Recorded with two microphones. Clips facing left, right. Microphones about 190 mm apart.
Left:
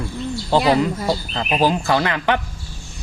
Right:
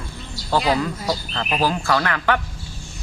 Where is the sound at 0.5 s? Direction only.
20° left (ahead or behind).